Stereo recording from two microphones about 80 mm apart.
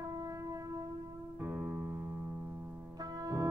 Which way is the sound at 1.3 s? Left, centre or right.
Right.